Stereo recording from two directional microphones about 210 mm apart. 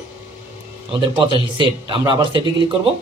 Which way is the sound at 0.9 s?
25° right (ahead or behind).